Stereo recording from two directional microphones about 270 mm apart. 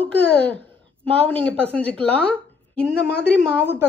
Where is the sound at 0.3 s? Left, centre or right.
Centre.